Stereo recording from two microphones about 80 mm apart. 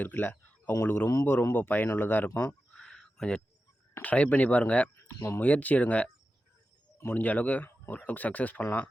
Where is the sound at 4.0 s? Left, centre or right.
Centre.